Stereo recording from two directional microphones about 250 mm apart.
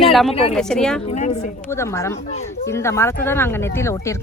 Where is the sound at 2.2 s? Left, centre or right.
Left.